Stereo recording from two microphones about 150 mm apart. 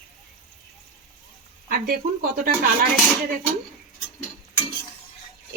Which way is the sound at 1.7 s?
75° right (ahead or behind).